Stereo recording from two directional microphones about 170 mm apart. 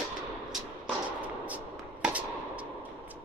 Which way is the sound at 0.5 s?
5° right (ahead or behind).